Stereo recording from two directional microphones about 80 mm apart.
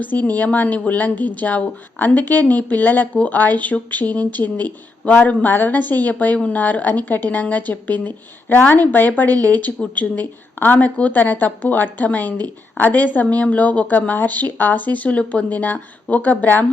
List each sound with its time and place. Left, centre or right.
0.0 s a woman's voice: left